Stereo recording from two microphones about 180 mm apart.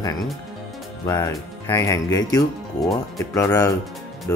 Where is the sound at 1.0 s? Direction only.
20° left (ahead or behind).